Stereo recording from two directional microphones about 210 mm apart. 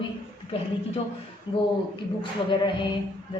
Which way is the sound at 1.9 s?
20° left (ahead or behind).